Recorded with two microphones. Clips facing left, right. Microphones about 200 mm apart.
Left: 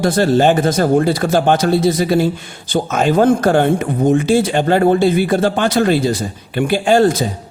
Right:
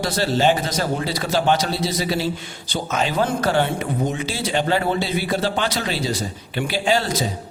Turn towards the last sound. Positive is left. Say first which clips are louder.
# left 8 dB
turn(degrees=50)  # may be behind; listen again after turning